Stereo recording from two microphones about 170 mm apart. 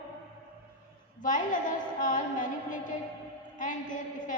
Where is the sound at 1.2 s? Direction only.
50° left (ahead or behind).